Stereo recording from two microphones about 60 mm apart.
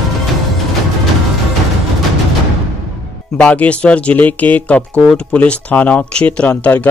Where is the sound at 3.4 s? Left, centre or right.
Left.